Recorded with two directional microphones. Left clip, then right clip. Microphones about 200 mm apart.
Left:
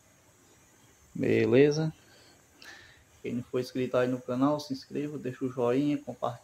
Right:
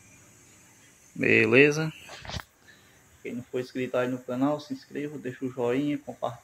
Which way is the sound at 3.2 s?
15° left (ahead or behind).